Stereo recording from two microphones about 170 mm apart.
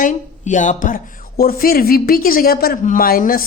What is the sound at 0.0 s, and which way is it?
Speech, 50° left (ahead or behind).